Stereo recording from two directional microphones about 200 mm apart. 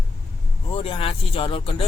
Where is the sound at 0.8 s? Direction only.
25° left (ahead or behind).